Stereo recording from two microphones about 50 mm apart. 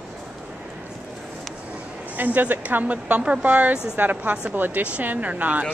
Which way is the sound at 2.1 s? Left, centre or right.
Right.